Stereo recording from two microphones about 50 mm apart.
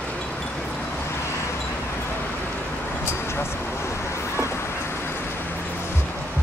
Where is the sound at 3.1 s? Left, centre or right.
Left.